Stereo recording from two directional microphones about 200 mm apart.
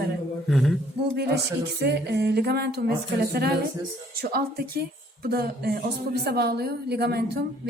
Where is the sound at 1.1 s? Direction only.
55° right (ahead or behind).